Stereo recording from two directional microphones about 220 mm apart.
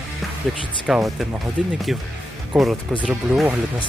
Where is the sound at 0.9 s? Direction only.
Centre (ahead or behind).